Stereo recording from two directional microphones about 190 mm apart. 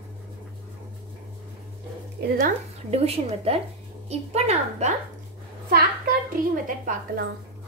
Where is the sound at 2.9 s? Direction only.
35° right (ahead or behind).